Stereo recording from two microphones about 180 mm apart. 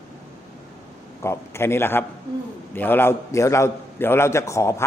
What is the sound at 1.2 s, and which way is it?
A man's voice, 15° left (ahead or behind).